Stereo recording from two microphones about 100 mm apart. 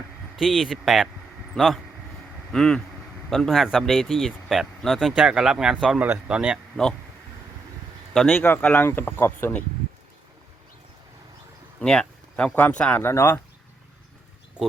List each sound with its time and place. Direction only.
0.3 s speech: 5° right (ahead or behind)
8.1 s speech: 5° left (ahead or behind)
8.4 s speech: 20° left (ahead or behind)
11.8 s a sound: 10° left (ahead or behind)
12.5 s speech: 15° left (ahead or behind)
13.0 s speech: 25° left (ahead or behind)